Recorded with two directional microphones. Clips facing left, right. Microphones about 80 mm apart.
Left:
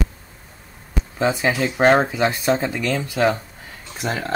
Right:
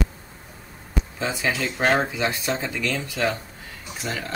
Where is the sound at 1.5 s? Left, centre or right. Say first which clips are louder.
Left 5 dB; centre.